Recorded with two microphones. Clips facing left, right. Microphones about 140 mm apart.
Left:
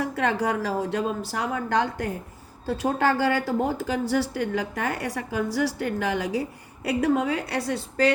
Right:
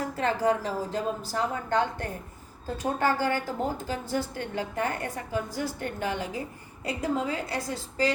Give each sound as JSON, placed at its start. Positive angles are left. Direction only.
{"t": 0.0, "sound": "a woman's voice", "side_deg": 75}
{"t": 2.6, "sound": "a woman's voice", "side_deg": 90}
{"t": 6.8, "sound": "a woman's voice", "side_deg": 70}